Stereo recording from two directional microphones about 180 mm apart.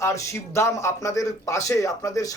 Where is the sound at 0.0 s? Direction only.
15° left (ahead or behind).